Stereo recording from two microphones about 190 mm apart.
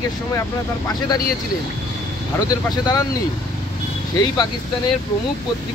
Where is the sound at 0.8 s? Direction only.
20° left (ahead or behind).